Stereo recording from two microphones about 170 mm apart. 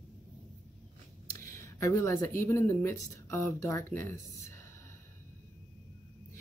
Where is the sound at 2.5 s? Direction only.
15° left (ahead or behind).